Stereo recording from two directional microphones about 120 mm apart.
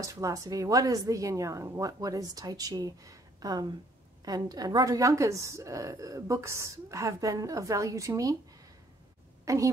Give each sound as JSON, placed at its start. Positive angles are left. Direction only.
{"t": 0.0, "sound": "a woman's voice", "side_deg": -25}
{"t": 9.4, "sound": "a woman's voice", "side_deg": -25}